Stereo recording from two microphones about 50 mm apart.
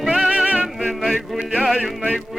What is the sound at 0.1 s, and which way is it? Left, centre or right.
Music, right.